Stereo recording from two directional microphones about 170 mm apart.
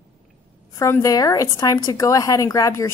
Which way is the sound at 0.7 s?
15° left (ahead or behind).